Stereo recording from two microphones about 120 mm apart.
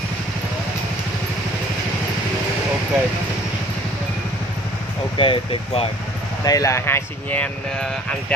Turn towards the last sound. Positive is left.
turn(degrees=15)  # may be behind; listen again after turning